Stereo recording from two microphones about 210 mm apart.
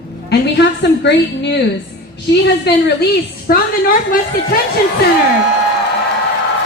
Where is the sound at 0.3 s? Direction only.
55° left (ahead or behind).